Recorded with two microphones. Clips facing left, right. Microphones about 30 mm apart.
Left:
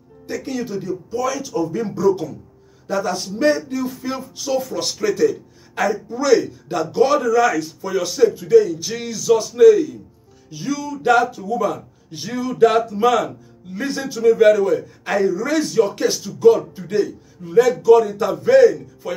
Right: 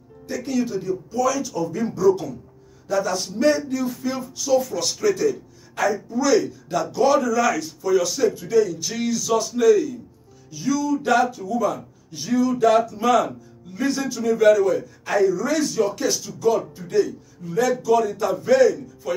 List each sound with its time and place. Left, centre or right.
0.3 s speech: centre
5.0 s speech: centre
5.8 s speech: left
6.9 s speech: left
11.1 s speech: centre
12.1 s speech: left